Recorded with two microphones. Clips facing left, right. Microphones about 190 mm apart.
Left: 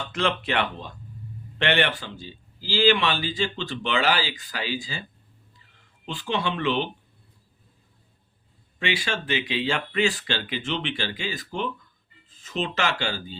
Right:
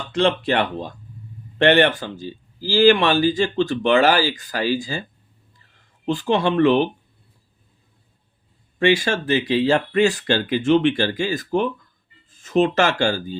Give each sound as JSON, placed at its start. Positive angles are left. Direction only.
{"t": 0.1, "sound": "speech", "side_deg": -35}
{"t": 6.1, "sound": "speech", "side_deg": -45}
{"t": 8.8, "sound": "speech", "side_deg": -45}